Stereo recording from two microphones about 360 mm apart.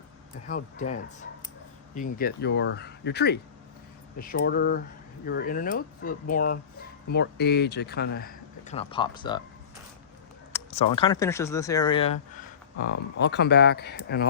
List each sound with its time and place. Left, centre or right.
0.4 s speech: left
2.0 s speech: left
10.5 s speech: centre
12.8 s speech: left